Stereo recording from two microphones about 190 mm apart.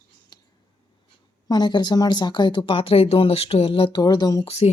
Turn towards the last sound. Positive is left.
turn(degrees=20)  # may be behind; listen again after turning